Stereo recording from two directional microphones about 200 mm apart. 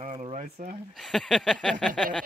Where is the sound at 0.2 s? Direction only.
35° right (ahead or behind).